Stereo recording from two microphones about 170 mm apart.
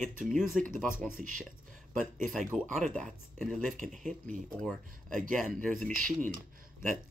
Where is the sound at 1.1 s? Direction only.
50° right (ahead or behind).